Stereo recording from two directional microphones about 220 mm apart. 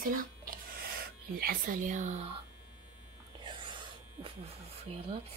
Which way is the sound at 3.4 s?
20° right (ahead or behind).